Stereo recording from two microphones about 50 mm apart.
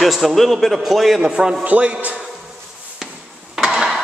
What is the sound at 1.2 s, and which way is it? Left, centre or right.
Speech, centre.